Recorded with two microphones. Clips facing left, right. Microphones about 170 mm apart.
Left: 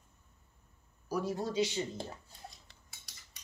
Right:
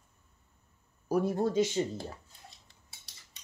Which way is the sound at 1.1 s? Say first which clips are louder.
Right 6 dB; 55° right (ahead or behind).